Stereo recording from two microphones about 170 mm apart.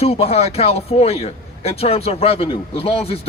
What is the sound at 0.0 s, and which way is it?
A man's voice, 35° left (ahead or behind).